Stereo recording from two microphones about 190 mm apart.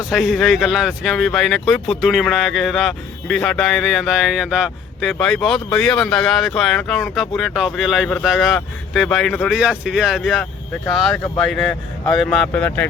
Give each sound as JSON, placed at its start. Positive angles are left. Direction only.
{"t": 0.0, "sound": "speech", "side_deg": 0}